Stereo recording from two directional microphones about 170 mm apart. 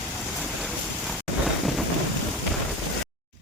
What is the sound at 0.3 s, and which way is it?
Vehicle, centre (ahead or behind).